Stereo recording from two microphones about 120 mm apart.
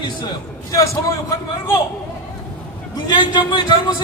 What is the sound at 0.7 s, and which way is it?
Speech, 30° left (ahead or behind).